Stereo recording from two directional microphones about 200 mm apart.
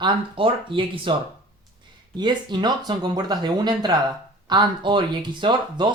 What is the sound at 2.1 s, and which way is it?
Speech, 20° right (ahead or behind).